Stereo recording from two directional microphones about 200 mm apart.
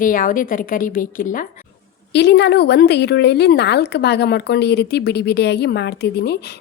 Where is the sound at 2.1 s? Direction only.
55° left (ahead or behind).